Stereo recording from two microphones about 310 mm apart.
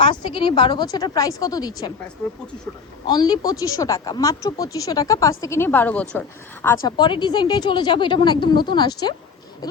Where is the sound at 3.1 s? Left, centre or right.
Centre.